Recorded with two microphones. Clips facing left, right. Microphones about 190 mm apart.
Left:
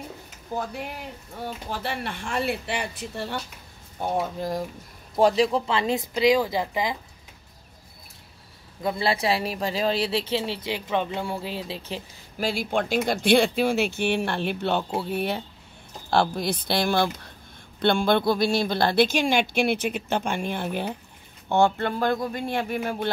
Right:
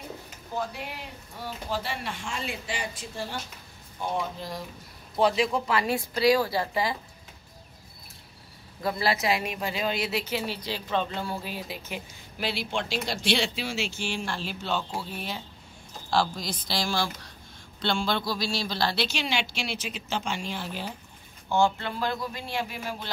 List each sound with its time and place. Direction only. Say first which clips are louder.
1.4 s a woman's voice: left 1 dB; 55° left (ahead or behind)
4.0 s speech: left 4 dB; 50° left (ahead or behind)
5.1 s speech: left 4 dB; 40° left (ahead or behind); by 7.0 s 15° left (ahead or behind)
8.8 s speech: left 2 dB; 30° left (ahead or behind)
12.4 s a woman's voice: left 5 dB; 45° left (ahead or behind)